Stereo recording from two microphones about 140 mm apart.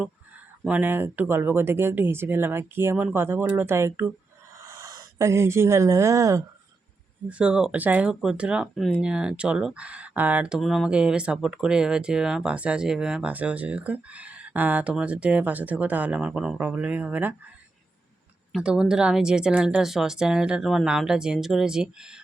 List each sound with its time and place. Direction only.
0.7 s speech: 15° right (ahead or behind)
7.3 s speech: 5° right (ahead or behind)
18.5 s speech: 5° right (ahead or behind)